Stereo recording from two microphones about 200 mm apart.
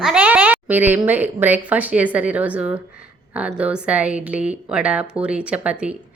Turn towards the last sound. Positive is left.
turn(degrees=-5)  # may be behind; listen again after turning